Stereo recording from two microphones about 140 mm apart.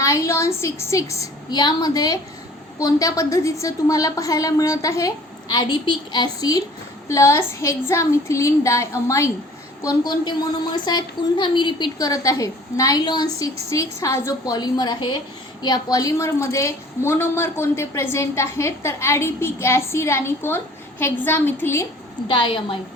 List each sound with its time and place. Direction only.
0.0 s a woman's voice: 20° left (ahead or behind)
22.3 s a woman's voice: 35° left (ahead or behind)